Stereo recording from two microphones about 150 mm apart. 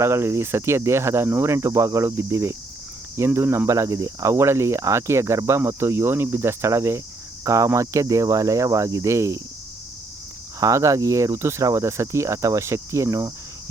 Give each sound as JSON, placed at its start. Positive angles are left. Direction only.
{"t": 0.0, "sound": "speech", "side_deg": -15}
{"t": 10.6, "sound": "speech", "side_deg": -20}